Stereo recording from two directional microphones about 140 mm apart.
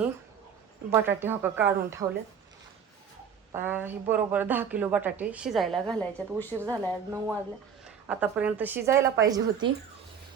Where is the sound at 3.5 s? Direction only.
15° right (ahead or behind).